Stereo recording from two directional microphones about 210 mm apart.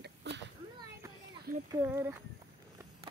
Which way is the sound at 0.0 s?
50° right (ahead or behind).